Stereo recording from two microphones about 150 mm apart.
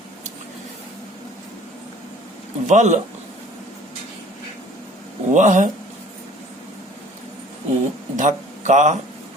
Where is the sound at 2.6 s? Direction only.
50° right (ahead or behind).